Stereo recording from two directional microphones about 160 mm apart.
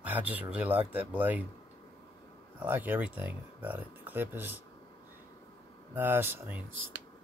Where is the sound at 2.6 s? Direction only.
10° right (ahead or behind).